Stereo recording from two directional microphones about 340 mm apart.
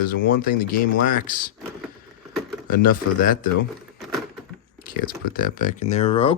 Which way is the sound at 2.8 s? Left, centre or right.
Left.